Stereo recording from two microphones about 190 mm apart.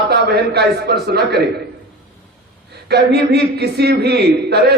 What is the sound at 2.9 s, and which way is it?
A man's voice, 60° right (ahead or behind).